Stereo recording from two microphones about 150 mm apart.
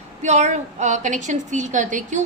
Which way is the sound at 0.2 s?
50° right (ahead or behind).